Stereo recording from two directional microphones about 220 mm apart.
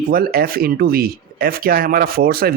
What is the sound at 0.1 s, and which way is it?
Speech, 45° right (ahead or behind).